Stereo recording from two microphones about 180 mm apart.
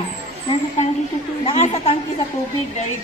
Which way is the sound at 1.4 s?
35° left (ahead or behind).